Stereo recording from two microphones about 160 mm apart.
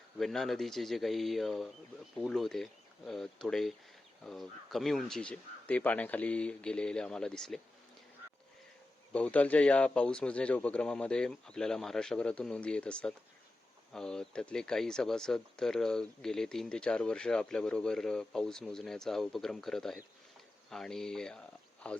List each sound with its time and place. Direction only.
0.2 s speech: centre (ahead or behind)
9.1 s speech: 10° left (ahead or behind)